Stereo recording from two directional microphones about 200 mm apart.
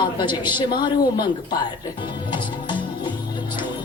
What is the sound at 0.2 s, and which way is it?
A woman's voice, 20° left (ahead or behind).